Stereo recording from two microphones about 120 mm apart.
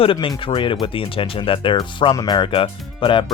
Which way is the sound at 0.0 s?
45° left (ahead or behind).